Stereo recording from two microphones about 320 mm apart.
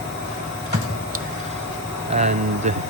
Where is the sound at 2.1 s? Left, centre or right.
Right.